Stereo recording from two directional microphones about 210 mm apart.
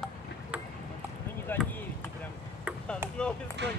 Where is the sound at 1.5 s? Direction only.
10° left (ahead or behind).